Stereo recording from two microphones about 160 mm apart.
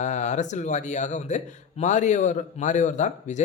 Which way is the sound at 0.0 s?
50° left (ahead or behind).